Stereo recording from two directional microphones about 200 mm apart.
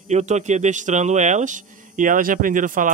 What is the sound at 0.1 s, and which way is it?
A man's voice, 35° right (ahead or behind).